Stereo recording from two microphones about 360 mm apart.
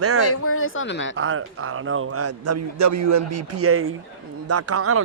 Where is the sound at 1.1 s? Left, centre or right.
Right.